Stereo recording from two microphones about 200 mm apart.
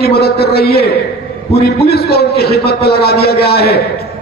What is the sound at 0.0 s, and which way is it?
A man's voice, 50° left (ahead or behind).